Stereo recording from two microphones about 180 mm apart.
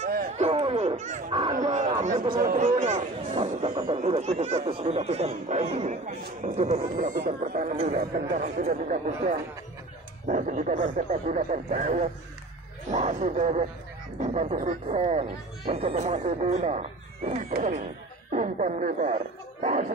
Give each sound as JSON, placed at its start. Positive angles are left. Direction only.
{"t": 0.0, "sound": "music", "side_deg": -50}
{"t": 0.4, "sound": "a sound", "side_deg": -30}
{"t": 1.3, "sound": "a sound", "side_deg": -25}
{"t": 1.6, "sound": "speech", "side_deg": -40}
{"t": 2.2, "sound": "speech", "side_deg": -50}
{"t": 7.7, "sound": "speech", "side_deg": -40}